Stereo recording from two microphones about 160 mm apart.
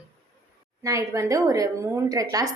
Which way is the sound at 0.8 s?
20° right (ahead or behind).